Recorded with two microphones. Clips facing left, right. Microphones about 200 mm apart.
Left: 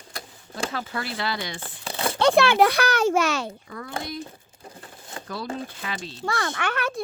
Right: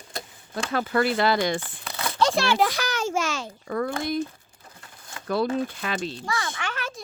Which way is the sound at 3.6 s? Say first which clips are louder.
Right 11 dB; 65° right (ahead or behind).